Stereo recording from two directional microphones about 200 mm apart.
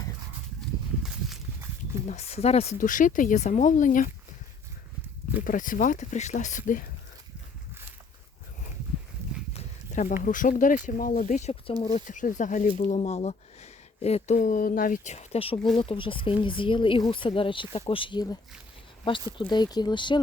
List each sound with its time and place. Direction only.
2.0 s speech: 30° left (ahead or behind)
5.5 s speech: 40° left (ahead or behind)
9.5 s a sound: 35° left (ahead or behind)
10.2 s speech: 40° left (ahead or behind)
15.5 s speech: 5° left (ahead or behind)
15.8 s speech: 25° left (ahead or behind)
19.4 s speech: 20° left (ahead or behind)